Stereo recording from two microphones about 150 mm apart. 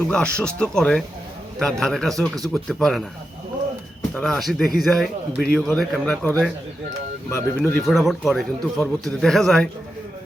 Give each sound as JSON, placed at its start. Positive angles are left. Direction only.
{"t": 0.1, "sound": "a man's voice", "side_deg": 5}
{"t": 4.1, "sound": "a man's voice", "side_deg": 5}
{"t": 7.3, "sound": "speech", "side_deg": 15}
{"t": 7.8, "sound": "a man's voice", "side_deg": 0}